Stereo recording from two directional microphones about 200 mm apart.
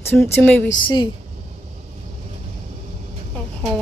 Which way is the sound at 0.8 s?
20° left (ahead or behind).